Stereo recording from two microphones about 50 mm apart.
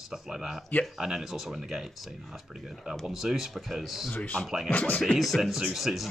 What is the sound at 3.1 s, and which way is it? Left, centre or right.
A man's voice, centre.